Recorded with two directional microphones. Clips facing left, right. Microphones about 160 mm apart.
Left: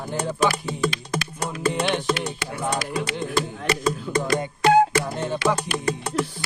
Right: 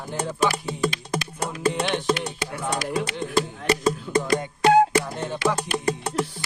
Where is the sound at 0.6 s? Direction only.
25° right (ahead or behind).